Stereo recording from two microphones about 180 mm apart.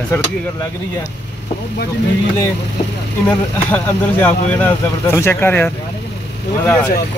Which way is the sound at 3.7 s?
10° left (ahead or behind).